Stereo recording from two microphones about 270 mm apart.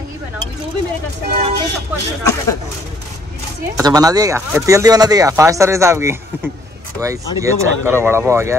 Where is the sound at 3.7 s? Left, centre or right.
Centre.